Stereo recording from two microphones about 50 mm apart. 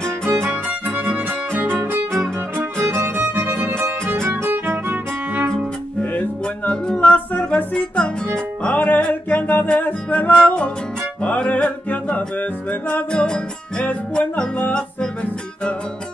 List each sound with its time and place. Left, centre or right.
0.0 s music: centre
0.8 s music: right
2.5 s music: right
3.4 s violin: right
4.4 s music: right
6.9 s music: centre
7.3 s music: left
8.6 s music: left
9.3 s humming: left
9.8 s music: left
13.1 s music: centre